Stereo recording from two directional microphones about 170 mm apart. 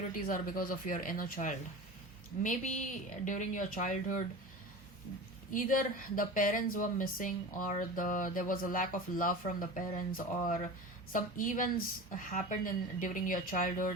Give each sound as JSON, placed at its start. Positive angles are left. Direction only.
{"t": 0.2, "sound": "speech", "side_deg": 55}
{"t": 5.5, "sound": "speech", "side_deg": 55}